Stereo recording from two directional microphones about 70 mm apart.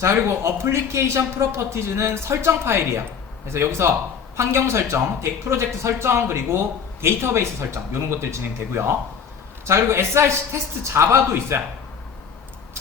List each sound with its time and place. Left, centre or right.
0.0 s a man's voice: right